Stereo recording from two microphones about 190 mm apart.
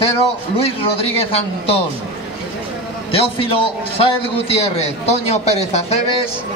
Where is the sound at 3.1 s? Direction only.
30° left (ahead or behind).